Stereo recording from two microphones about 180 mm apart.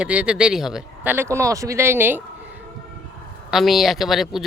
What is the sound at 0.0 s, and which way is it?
Speech, 5° right (ahead or behind).